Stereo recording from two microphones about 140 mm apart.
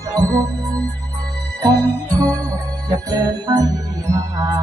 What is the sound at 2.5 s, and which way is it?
Music, 25° right (ahead or behind).